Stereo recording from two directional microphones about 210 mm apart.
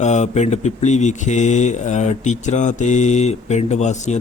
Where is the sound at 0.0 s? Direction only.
35° left (ahead or behind).